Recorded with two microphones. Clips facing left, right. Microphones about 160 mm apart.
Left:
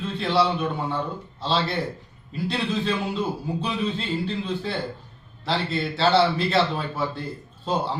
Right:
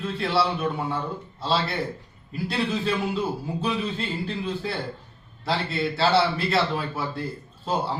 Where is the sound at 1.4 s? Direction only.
5° right (ahead or behind).